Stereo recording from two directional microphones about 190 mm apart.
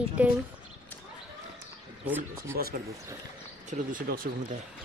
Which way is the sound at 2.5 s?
55° right (ahead or behind).